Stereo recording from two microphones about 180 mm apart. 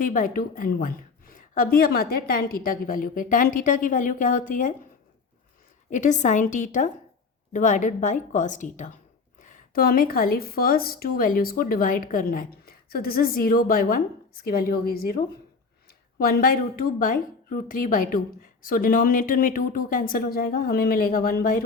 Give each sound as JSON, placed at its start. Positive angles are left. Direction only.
{"t": 0.0, "sound": "a woman's voice", "side_deg": 50}
{"t": 5.9, "sound": "a woman's voice", "side_deg": 45}